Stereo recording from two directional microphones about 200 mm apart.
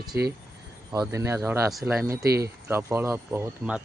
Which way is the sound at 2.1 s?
50° right (ahead or behind).